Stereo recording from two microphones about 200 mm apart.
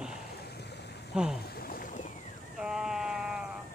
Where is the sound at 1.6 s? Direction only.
45° left (ahead or behind).